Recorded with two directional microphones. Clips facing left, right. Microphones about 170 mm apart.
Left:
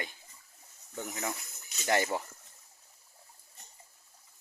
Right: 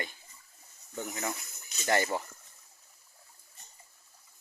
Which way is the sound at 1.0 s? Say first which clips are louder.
Right 1 dB; centre (ahead or behind).